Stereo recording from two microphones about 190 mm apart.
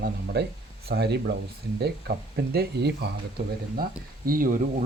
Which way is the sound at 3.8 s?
50° right (ahead or behind).